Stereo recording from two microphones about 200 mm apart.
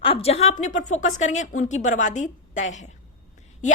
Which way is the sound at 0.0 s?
30° left (ahead or behind).